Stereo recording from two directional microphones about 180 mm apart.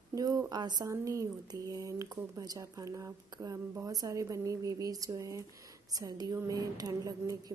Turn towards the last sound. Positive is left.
turn(degrees=-20)  # may be behind; listen again after turning